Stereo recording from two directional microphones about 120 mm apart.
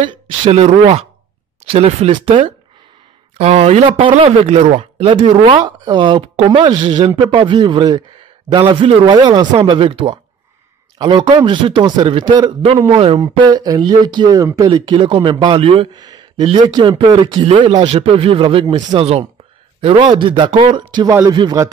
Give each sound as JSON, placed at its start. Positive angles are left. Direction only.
{"t": 0.1, "sound": "speech", "side_deg": -60}
{"t": 5.6, "sound": "a man's voice", "side_deg": -40}
{"t": 9.1, "sound": "a man's voice", "side_deg": -35}
{"t": 12.9, "sound": "speech", "side_deg": -50}
{"t": 13.2, "sound": "a man's voice", "side_deg": -35}
{"t": 14.9, "sound": "speech", "side_deg": -40}
{"t": 15.9, "sound": "a sound", "side_deg": -35}
{"t": 16.4, "sound": "a man's voice", "side_deg": -40}
{"t": 17.3, "sound": "speech", "side_deg": -45}
{"t": 18.9, "sound": "speech", "side_deg": -55}
{"t": 20.0, "sound": "a man's voice", "side_deg": -40}